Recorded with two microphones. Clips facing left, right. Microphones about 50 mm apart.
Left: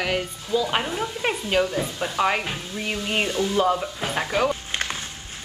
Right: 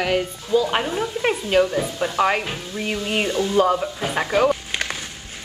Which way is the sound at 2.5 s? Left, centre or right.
Right.